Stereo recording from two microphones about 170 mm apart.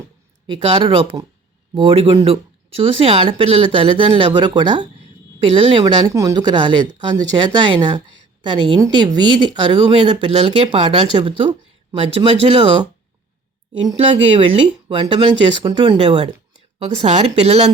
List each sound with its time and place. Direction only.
0.4 s speech: 30° right (ahead or behind)
14.3 s speech: 30° right (ahead or behind)